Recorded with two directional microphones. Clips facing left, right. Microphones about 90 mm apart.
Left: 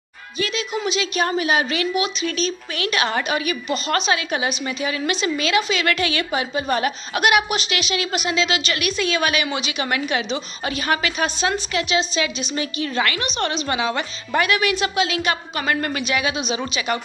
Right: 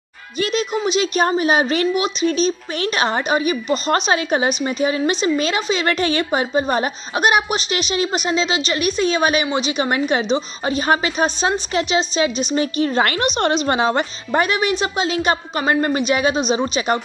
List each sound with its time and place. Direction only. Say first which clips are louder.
0.4 s a woman's voice: right 4 dB; 45° right (ahead or behind)